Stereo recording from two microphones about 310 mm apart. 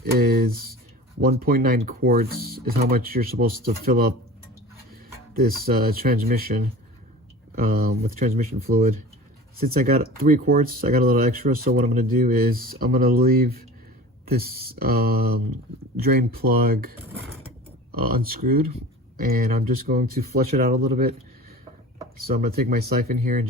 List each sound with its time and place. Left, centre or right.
0.0 s a sound: right
1.2 s speech: right
5.4 s speech: right
16.4 s speech: right
17.9 s speech: right
22.4 s speech: right